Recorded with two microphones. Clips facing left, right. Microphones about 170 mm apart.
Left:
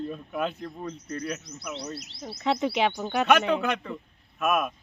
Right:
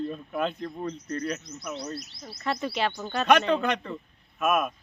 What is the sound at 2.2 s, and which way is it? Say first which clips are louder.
A man's voice: left 5 dB; 20° left (ahead or behind).